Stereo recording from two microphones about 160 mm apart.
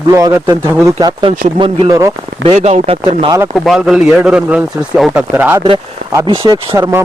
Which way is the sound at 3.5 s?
Centre (ahead or behind).